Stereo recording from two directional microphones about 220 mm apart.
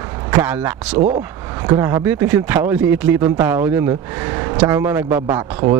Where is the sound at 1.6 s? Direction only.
15° right (ahead or behind).